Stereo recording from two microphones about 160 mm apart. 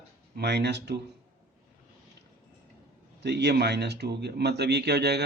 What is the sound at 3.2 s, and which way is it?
Speech, 90° right.